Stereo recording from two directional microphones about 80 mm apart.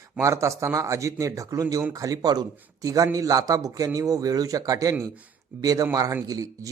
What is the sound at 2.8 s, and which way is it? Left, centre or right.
Speech, right.